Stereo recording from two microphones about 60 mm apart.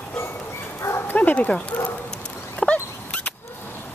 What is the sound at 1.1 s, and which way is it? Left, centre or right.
Dog, left.